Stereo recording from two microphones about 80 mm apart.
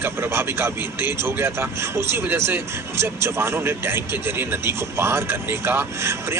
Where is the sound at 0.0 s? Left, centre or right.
Right.